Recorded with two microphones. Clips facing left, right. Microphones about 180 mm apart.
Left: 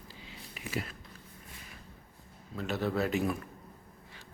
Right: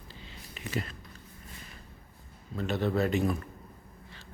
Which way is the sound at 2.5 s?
5° left (ahead or behind).